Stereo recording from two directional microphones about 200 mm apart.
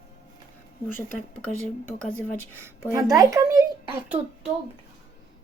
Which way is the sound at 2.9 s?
15° right (ahead or behind).